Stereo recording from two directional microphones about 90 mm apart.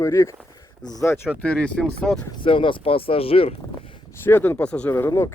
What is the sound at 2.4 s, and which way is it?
Speech, 75° left (ahead or behind).